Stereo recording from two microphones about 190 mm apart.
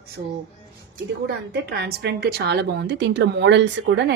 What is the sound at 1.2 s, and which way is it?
A woman's voice, 60° right (ahead or behind).